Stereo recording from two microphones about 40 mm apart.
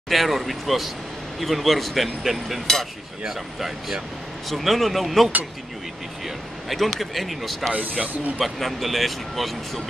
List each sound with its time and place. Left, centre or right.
0.1 s speech: centre
7.7 s speech: right
8.4 s speech: centre